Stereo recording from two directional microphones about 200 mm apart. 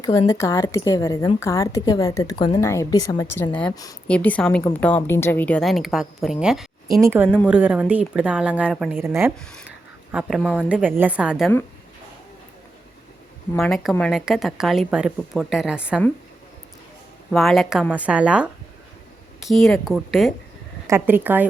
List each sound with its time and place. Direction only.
0.0 s a woman's voice: 15° left (ahead or behind)
4.0 s a woman's voice: 5° left (ahead or behind)
6.9 s a woman's voice: 15° right (ahead or behind)
13.6 s a woman's voice: centre (ahead or behind)
17.3 s a woman's voice: centre (ahead or behind)
20.8 s a woman's voice: 10° right (ahead or behind)